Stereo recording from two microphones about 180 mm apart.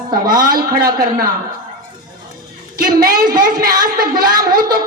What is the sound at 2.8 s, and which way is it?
A man's voice, 55° right (ahead or behind).